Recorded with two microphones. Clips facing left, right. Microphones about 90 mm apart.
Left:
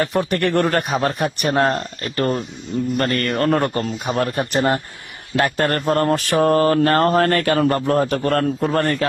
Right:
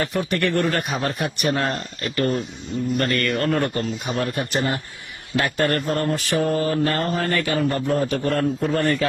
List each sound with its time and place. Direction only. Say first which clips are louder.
0.0 s a man's voice: left 3 dB; 40° left (ahead or behind)
7.2 s a man's voice: left 5 dB; 55° left (ahead or behind)